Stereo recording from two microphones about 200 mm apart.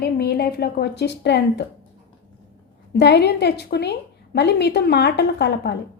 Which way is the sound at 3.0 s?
55° left (ahead or behind).